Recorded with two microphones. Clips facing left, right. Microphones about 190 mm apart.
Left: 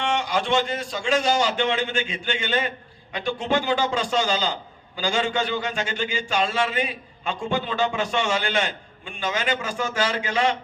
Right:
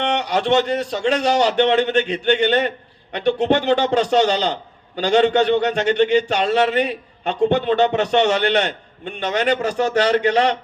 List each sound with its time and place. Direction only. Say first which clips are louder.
0.0 s a man's voice: right 4 dB; 65° right (ahead or behind)